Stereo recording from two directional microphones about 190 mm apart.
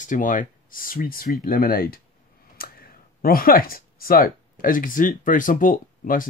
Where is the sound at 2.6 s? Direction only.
50° left (ahead or behind).